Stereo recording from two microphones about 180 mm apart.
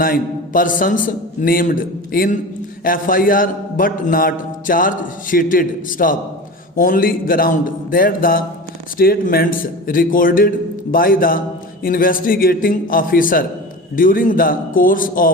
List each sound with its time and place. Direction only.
0.0 s a man's voice: 50° left (ahead or behind)